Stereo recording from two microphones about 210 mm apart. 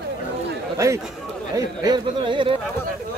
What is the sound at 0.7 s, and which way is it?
Speech, 15° right (ahead or behind).